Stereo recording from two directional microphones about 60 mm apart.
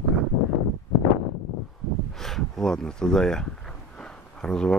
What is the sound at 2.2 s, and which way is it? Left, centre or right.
Speech, centre.